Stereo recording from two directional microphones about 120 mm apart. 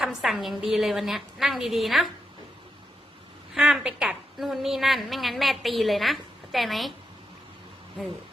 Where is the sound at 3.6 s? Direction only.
5° right (ahead or behind).